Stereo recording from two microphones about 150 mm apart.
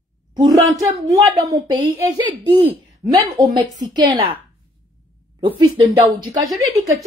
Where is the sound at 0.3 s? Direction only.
30° right (ahead or behind).